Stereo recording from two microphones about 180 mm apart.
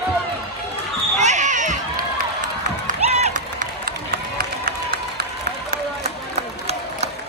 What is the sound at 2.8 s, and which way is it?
Run, 40° right (ahead or behind).